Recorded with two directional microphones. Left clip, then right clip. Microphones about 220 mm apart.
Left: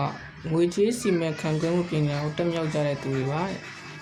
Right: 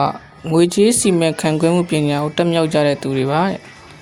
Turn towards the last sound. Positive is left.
turn(degrees=-45)  # may be behind; listen again after turning